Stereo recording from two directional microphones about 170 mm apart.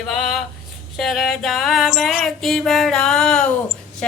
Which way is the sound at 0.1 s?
Centre (ahead or behind).